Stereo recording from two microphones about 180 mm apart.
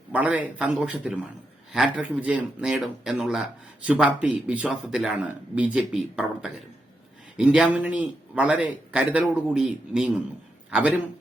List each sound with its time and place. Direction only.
0.1 s a man's voice: 10° right (ahead or behind)